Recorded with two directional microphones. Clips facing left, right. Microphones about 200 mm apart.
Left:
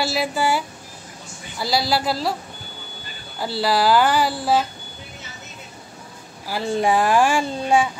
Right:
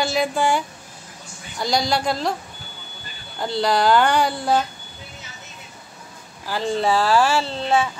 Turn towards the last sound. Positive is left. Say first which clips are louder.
# left 2 dB
turn(degrees=15)  # may be behind; listen again after turning